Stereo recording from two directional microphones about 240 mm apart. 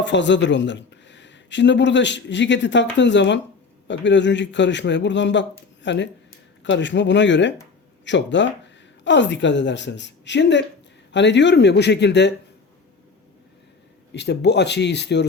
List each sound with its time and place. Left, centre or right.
0.0 s speech: left
14.1 s speech: left